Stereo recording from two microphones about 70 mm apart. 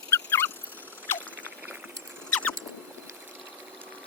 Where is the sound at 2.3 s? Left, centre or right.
Centre.